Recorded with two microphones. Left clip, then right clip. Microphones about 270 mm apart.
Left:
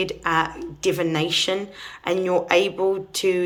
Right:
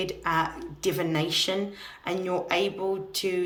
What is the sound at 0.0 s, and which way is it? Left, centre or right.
Speech, centre.